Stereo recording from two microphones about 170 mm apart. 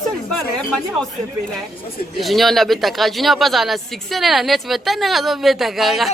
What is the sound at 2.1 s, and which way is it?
Speech, centre (ahead or behind).